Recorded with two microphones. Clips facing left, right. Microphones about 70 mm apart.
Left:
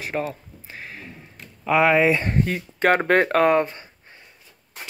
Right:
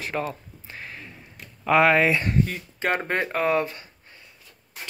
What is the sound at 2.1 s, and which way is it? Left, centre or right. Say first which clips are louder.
Speech: left 2 dB; left.